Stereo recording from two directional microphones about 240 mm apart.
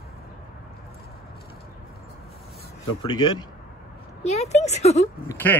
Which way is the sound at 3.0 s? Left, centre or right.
Centre.